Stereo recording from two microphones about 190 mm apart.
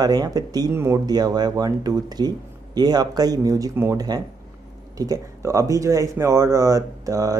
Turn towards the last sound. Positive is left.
turn(degrees=-20)  # may be behind; listen again after turning